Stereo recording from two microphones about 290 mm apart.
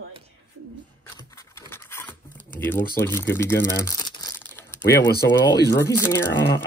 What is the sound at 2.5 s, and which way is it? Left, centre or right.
Speech, centre.